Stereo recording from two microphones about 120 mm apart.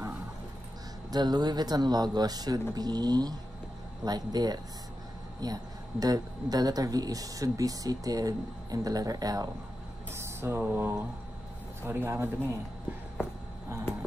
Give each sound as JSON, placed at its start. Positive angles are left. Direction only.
{"t": 1.1, "sound": "speech", "side_deg": -35}
{"t": 10.1, "sound": "speech", "side_deg": -20}